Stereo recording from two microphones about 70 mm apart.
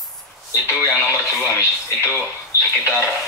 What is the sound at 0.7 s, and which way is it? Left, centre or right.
Speech, left.